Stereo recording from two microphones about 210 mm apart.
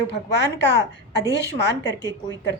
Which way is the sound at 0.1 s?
55° left (ahead or behind).